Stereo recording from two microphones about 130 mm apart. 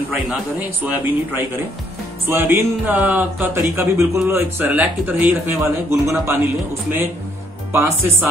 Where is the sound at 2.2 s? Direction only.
20° right (ahead or behind).